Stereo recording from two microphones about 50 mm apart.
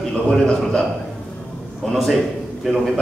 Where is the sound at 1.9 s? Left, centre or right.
Centre.